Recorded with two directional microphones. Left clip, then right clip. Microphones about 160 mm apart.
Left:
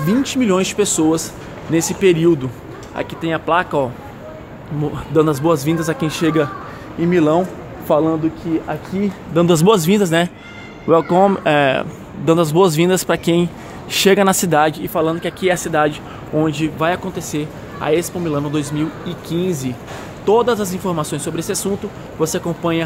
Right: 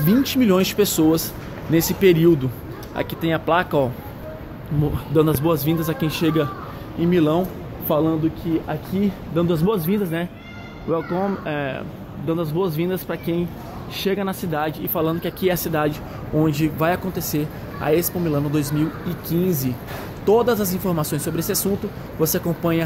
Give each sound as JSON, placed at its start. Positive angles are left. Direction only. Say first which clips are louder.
{"t": 0.0, "sound": "speech", "louder": "left 1 dB", "side_deg": 0}
{"t": 5.1, "sound": "a man's voice", "louder": "left 4 dB", "side_deg": 15}
{"t": 5.4, "sound": "speech", "louder": "left 4 dB", "side_deg": 30}
{"t": 9.3, "sound": "speech", "louder": "left 9 dB", "side_deg": 60}
{"t": 10.9, "sound": "speech", "louder": "left 10 dB", "side_deg": 65}
{"t": 15.0, "sound": "speech", "louder": "left 3 dB", "side_deg": 5}